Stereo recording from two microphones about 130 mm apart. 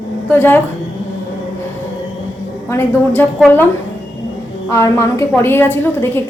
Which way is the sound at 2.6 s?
20° left (ahead or behind).